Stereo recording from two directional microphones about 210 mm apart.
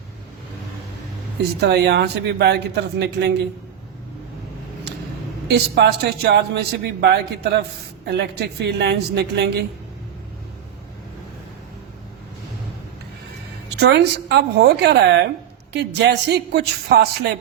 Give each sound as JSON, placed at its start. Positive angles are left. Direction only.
{"t": 1.6, "sound": "a man's voice", "side_deg": -50}
{"t": 5.5, "sound": "a man's voice", "side_deg": -50}
{"t": 13.7, "sound": "a man's voice", "side_deg": -50}